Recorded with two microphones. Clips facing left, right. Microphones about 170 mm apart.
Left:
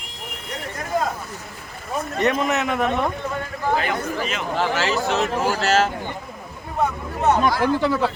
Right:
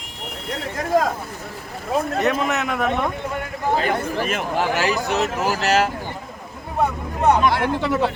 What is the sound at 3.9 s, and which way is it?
Speech, 50° right (ahead or behind).